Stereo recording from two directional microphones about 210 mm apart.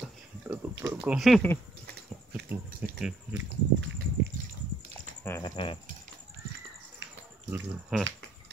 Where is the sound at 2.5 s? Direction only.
5° right (ahead or behind).